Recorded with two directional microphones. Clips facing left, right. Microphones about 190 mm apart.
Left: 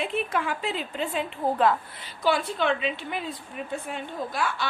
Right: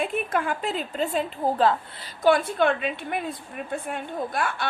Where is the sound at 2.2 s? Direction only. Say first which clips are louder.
Right 4 dB; 50° right (ahead or behind).